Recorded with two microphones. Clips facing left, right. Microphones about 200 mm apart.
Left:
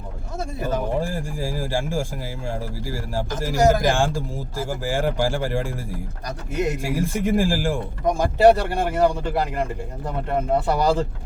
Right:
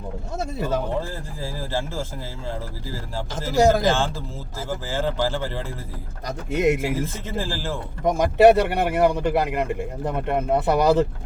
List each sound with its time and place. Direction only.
0.6 s speech: 15° left (ahead or behind)
6.2 s speech: 20° right (ahead or behind)
7.0 s speech: 10° left (ahead or behind)
8.0 s speech: 20° right (ahead or behind)